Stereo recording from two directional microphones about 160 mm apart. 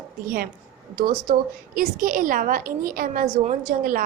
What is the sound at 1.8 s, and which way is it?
A woman's voice, 60° right (ahead or behind).